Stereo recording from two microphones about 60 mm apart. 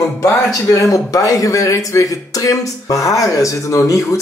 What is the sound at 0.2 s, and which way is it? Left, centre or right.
Speech, left.